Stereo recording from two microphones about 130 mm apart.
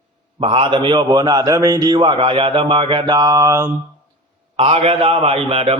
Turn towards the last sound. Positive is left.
turn(degrees=-50)  # may be behind; listen again after turning